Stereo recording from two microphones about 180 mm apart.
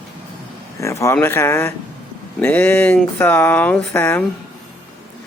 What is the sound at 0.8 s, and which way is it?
Speech, 15° left (ahead or behind).